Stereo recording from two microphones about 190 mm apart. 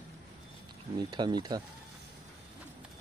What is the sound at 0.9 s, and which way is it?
Speech, 25° right (ahead or behind).